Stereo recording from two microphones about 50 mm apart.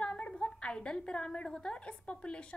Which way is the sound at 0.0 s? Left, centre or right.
Left.